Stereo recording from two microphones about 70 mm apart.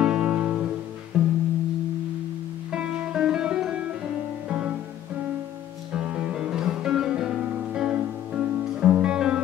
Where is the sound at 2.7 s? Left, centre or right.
Centre.